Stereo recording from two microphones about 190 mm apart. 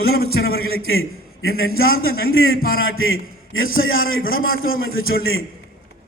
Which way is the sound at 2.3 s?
90° left.